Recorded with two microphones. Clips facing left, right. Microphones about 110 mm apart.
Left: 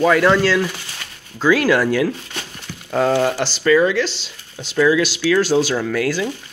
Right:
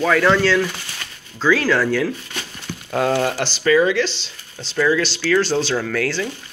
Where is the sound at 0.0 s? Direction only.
5° left (ahead or behind).